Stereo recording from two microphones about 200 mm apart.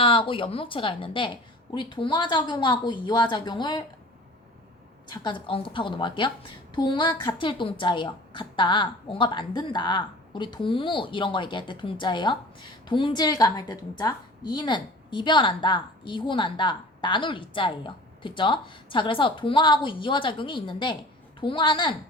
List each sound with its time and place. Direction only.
0.0 s a woman's voice: 25° left (ahead or behind)
5.0 s a woman's voice: 20° left (ahead or behind)